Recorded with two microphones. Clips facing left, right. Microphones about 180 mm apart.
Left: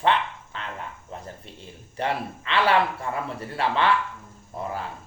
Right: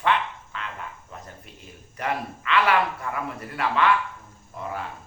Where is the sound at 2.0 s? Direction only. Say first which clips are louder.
Left 1 dB; 30° left (ahead or behind).